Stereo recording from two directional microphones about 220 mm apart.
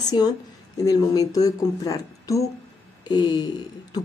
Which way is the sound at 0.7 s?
15° left (ahead or behind).